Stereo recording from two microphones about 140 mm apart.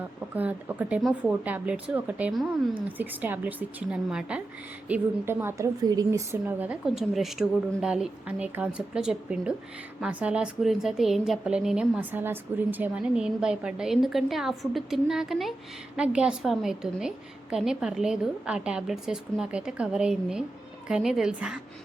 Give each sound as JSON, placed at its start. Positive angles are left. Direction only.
{"t": 0.3, "sound": "speech", "side_deg": -10}
{"t": 2.3, "sound": "a woman's voice", "side_deg": 0}
{"t": 3.0, "sound": "a woman's voice", "side_deg": -10}